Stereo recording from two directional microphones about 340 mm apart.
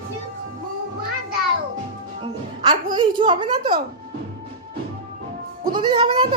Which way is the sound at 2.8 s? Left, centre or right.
Centre.